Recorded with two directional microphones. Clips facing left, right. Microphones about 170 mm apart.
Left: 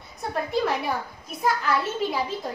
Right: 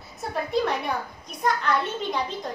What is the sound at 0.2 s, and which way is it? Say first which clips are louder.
A child's voice: even; centre (ahead or behind).